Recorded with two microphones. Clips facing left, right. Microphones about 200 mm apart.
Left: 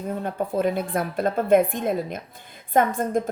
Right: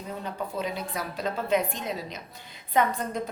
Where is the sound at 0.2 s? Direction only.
50° left (ahead or behind).